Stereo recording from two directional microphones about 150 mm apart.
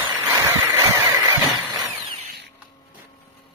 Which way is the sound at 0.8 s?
25° right (ahead or behind).